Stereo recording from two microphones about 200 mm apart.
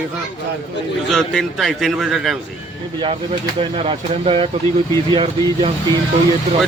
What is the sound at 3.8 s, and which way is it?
Speech, 30° right (ahead or behind).